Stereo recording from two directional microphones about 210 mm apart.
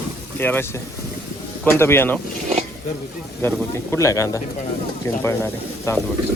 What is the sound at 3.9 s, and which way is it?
Speech, 15° left (ahead or behind).